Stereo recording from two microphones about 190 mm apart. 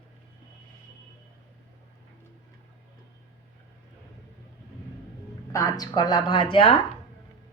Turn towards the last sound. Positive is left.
turn(degrees=25)  # may be behind; listen again after turning